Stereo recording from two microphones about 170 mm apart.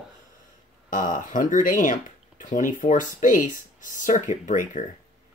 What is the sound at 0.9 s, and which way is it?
Speech, 50° left (ahead or behind).